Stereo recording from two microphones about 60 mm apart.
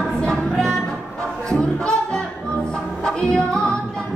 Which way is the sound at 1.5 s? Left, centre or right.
Centre.